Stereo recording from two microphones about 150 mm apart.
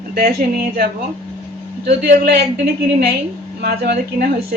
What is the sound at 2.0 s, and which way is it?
A man's voice, 90° right.